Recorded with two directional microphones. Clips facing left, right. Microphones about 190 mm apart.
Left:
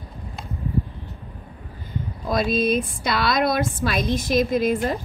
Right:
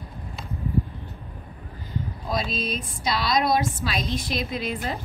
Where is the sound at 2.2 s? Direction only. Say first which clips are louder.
Left 8 dB; 55° left (ahead or behind).